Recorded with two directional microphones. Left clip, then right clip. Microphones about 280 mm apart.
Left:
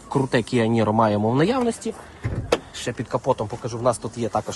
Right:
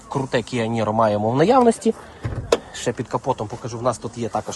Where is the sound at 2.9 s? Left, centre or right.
Right.